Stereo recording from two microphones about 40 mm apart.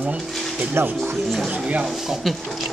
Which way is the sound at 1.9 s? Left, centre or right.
Centre.